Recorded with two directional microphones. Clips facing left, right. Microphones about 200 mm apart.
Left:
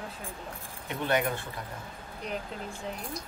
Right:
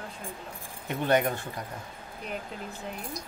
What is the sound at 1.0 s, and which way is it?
Speech, 45° right (ahead or behind).